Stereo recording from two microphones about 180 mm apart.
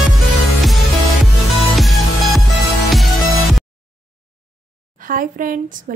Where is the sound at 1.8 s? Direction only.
Centre (ahead or behind).